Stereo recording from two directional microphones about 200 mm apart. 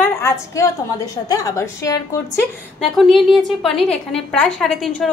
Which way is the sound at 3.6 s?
Centre (ahead or behind).